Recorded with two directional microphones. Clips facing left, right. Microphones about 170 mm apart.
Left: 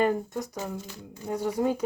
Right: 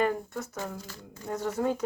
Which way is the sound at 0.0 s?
20° left (ahead or behind).